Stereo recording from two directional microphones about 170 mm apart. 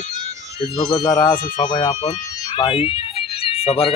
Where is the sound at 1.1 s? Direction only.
20° left (ahead or behind).